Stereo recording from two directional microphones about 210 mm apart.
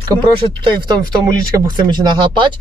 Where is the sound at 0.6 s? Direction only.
20° right (ahead or behind).